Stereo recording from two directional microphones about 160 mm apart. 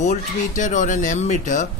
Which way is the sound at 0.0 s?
50° left (ahead or behind).